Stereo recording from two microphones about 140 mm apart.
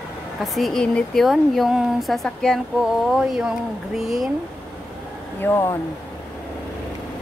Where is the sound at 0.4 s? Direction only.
Centre (ahead or behind).